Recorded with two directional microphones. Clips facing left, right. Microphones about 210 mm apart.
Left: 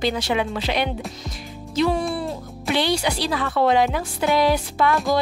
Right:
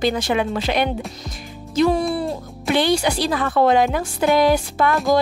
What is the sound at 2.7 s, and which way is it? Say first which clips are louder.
Speech: right 4 dB; 50° right (ahead or behind).